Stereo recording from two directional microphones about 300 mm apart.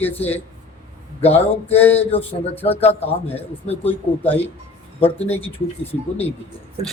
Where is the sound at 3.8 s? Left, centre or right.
Centre.